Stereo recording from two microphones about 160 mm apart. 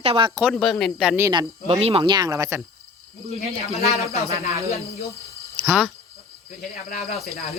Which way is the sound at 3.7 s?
40° left (ahead or behind).